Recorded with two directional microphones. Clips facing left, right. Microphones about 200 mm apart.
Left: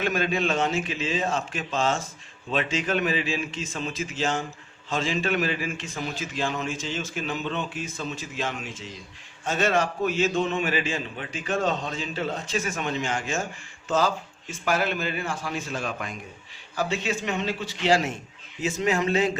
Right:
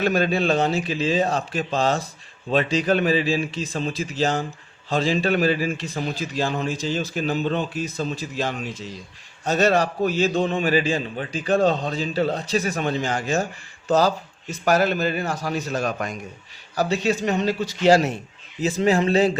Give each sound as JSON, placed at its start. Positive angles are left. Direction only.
{"t": 0.0, "sound": "a man's voice", "side_deg": -35}